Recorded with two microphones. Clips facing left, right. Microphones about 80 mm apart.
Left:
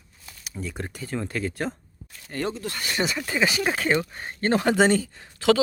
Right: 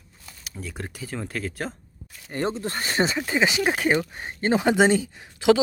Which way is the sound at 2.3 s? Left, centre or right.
Right.